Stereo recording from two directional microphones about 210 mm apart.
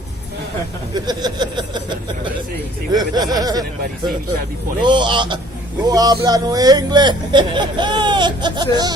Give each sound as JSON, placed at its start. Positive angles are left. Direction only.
{"t": 1.0, "sound": "speech", "side_deg": -20}
{"t": 2.9, "sound": "speech", "side_deg": -20}
{"t": 4.8, "sound": "speech", "side_deg": -20}